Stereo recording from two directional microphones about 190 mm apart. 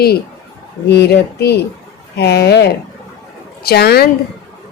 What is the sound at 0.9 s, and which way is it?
Speech, 60° left (ahead or behind).